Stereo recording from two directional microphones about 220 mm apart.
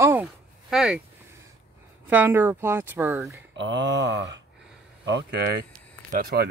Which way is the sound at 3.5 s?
55° right (ahead or behind).